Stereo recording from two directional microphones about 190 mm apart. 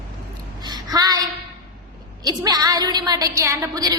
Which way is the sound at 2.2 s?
20° right (ahead or behind).